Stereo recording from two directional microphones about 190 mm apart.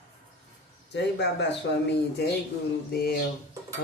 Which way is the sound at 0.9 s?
65° left (ahead or behind).